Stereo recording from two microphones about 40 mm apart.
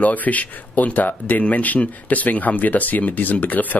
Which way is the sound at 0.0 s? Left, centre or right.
Left.